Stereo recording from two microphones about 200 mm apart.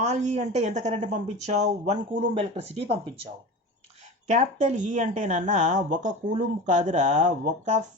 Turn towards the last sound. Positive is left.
turn(degrees=-35)  # may be behind; listen again after turning